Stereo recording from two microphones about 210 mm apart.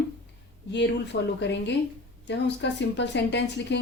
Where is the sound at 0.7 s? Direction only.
55° left (ahead or behind).